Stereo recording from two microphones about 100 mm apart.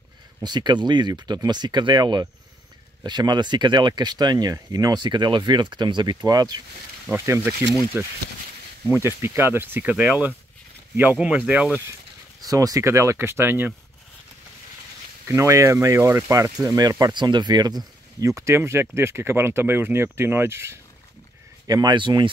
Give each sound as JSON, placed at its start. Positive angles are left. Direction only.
{"t": 0.4, "sound": "speech", "side_deg": -45}
{"t": 7.2, "sound": "speech", "side_deg": -30}
{"t": 12.4, "sound": "speech", "side_deg": -35}
{"t": 15.2, "sound": "speech", "side_deg": -30}
{"t": 16.6, "sound": "speech", "side_deg": -40}
{"t": 21.6, "sound": "speech", "side_deg": -40}
{"t": 21.9, "sound": "speech", "side_deg": -50}